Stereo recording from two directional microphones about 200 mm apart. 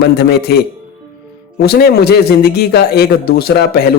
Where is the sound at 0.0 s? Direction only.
50° left (ahead or behind).